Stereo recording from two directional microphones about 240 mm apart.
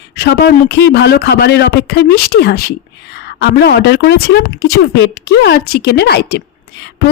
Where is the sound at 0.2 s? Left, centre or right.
Left.